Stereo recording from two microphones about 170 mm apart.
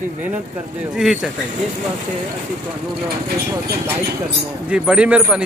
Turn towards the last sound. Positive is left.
turn(degrees=-5)  # may be behind; listen again after turning